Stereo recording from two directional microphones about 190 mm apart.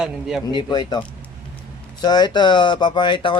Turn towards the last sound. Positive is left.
turn(degrees=25)  # may be behind; listen again after turning